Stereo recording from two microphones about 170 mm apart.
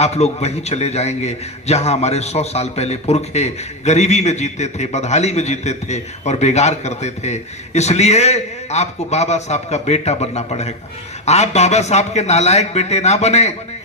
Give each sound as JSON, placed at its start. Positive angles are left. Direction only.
{"t": 0.0, "sound": "a man's voice", "side_deg": 40}